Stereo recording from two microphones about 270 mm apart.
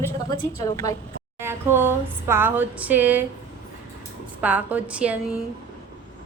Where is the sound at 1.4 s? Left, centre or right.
Centre.